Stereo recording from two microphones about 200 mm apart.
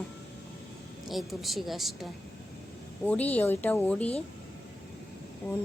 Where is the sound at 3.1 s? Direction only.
10° left (ahead or behind).